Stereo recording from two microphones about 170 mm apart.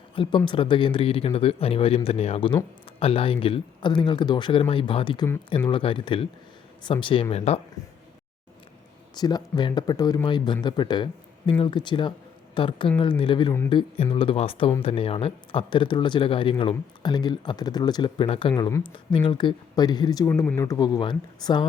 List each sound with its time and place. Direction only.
0.2 s speech: 25° left (ahead or behind)
9.1 s speech: 25° left (ahead or behind)